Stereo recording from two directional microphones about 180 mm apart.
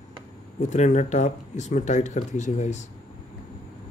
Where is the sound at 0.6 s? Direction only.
40° left (ahead or behind).